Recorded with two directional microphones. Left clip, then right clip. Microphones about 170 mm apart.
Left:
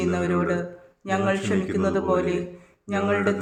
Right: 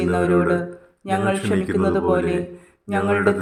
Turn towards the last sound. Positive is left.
turn(degrees=-20)  # may be behind; listen again after turning